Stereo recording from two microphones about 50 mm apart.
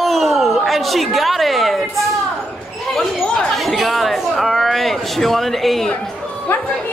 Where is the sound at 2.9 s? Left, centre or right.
Centre.